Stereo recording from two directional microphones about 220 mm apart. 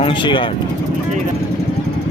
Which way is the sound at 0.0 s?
20° left (ahead or behind).